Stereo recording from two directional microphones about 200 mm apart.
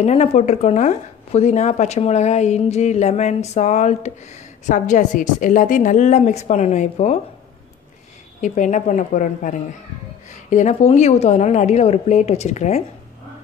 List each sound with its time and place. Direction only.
0.0 s speech: 35° left (ahead or behind)
8.4 s speech: 40° left (ahead or behind)